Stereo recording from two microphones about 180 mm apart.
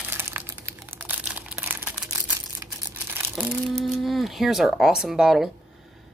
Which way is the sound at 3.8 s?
Centre (ahead or behind).